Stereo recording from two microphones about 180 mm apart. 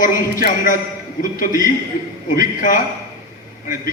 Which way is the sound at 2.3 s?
50° left (ahead or behind).